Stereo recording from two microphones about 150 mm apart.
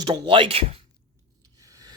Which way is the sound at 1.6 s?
25° right (ahead or behind).